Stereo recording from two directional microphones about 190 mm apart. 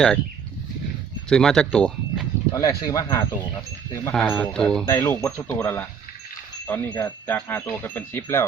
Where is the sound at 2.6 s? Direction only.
20° left (ahead or behind).